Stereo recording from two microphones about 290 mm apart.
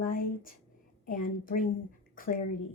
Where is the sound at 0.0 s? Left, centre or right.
Left.